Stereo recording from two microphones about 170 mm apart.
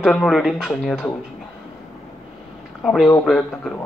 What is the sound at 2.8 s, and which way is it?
Speech, 5° left (ahead or behind).